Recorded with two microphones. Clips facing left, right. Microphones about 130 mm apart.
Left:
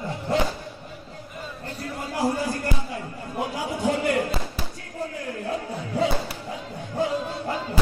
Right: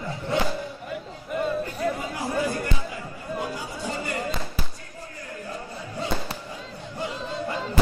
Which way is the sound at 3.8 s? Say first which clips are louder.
Left 9 dB; 70° left (ahead or behind).